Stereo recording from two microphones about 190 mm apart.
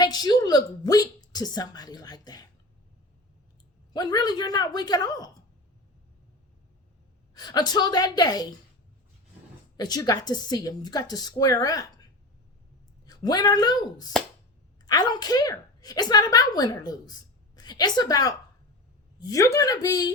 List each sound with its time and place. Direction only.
0.0 s speech: 20° left (ahead or behind)
3.9 s a woman's voice: 20° left (ahead or behind)
7.3 s a woman's voice: 20° left (ahead or behind)
9.7 s a woman's voice: 20° left (ahead or behind)
13.1 s a woman's voice: 20° left (ahead or behind)